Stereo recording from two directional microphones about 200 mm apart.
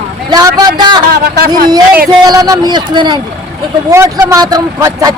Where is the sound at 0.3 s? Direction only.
20° right (ahead or behind).